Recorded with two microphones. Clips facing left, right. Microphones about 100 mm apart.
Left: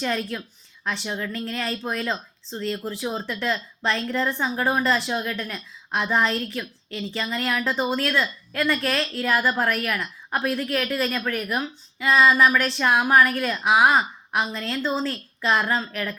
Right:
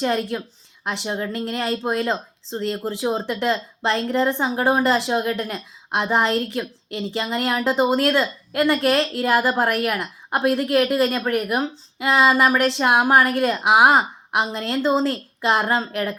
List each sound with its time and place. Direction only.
0.0 s a woman's voice: 25° right (ahead or behind)